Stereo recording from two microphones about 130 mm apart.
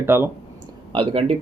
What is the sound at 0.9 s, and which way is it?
Speech, 45° right (ahead or behind).